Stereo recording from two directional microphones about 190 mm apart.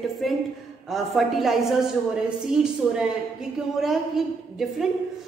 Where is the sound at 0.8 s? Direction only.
Centre (ahead or behind).